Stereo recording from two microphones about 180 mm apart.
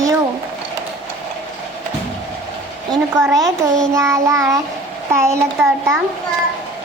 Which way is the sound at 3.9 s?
15° right (ahead or behind).